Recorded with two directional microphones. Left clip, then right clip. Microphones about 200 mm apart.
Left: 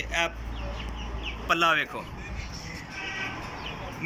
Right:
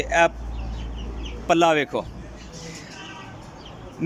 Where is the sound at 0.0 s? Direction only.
60° right (ahead or behind).